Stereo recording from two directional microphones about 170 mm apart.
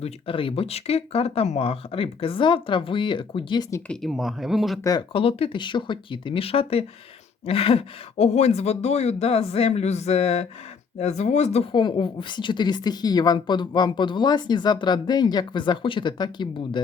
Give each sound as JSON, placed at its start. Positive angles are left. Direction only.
{"t": 0.0, "sound": "speech", "side_deg": 30}
{"t": 4.0, "sound": "speech", "side_deg": 0}
{"t": 4.8, "sound": "a woman's voice", "side_deg": 20}
{"t": 5.1, "sound": "speech", "side_deg": 35}
{"t": 11.7, "sound": "a woman's voice", "side_deg": 25}